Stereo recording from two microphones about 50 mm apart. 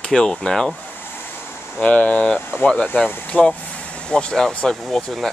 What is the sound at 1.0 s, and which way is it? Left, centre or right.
Waves, left.